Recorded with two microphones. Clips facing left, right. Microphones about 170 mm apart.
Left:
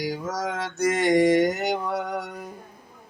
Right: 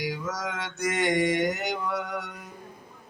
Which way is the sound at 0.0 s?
35° left (ahead or behind).